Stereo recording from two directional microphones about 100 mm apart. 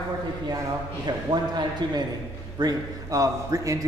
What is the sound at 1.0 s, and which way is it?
A man's voice, 45° right (ahead or behind).